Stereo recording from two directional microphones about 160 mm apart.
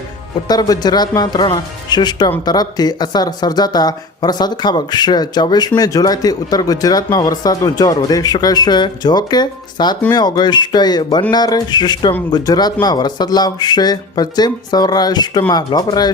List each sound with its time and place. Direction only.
0.4 s speech: 25° left (ahead or behind)